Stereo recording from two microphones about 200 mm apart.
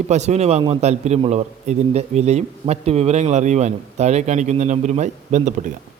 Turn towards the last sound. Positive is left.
turn(degrees=-35)  # may be behind; listen again after turning